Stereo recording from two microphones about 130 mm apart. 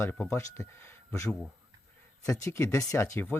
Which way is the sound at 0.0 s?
20° left (ahead or behind).